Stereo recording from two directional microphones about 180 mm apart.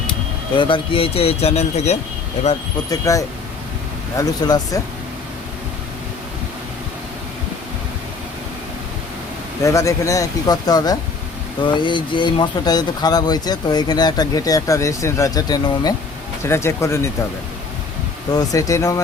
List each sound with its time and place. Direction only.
0.1 s speech: 30° left (ahead or behind)
2.9 s speech: 20° left (ahead or behind)
9.6 s speech: 15° left (ahead or behind)
18.3 s speech: 20° left (ahead or behind)